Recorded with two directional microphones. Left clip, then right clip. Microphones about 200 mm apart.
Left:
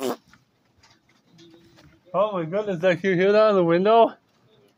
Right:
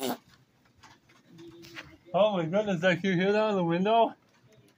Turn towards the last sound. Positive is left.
turn(degrees=35)  # may be behind; listen again after turning